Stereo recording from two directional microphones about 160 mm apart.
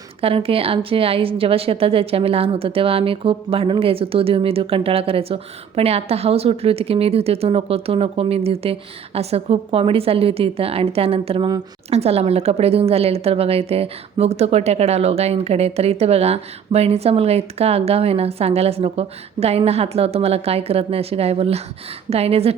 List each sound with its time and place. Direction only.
0.2 s a woman's voice: 35° right (ahead or behind)